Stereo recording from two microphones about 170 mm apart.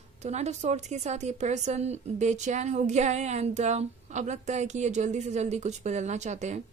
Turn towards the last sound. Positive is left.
turn(degrees=-45)  # may be behind; listen again after turning